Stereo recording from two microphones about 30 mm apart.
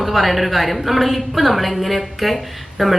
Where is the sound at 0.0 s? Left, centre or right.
Centre.